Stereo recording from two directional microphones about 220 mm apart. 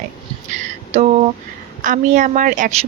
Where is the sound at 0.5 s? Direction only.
30° right (ahead or behind).